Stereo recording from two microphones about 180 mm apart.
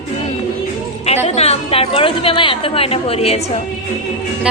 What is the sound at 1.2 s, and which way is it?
A woman's voice, 35° left (ahead or behind).